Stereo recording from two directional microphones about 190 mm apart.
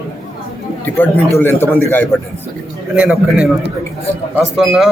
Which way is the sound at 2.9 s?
5° right (ahead or behind).